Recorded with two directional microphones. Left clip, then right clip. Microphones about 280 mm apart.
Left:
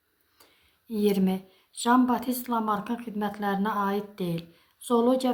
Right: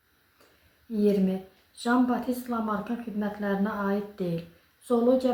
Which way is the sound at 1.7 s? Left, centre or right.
Left.